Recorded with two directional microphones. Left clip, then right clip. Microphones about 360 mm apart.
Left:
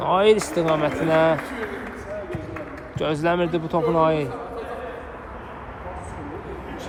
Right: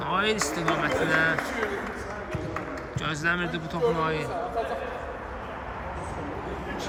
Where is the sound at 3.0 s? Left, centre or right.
Centre.